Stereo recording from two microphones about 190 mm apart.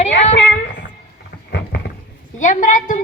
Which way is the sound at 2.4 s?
40° left (ahead or behind).